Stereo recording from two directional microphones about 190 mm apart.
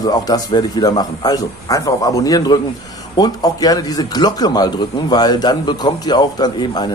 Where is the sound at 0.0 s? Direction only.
20° left (ahead or behind).